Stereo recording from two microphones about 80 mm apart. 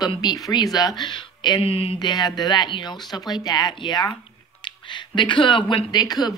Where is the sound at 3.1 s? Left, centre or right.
Left.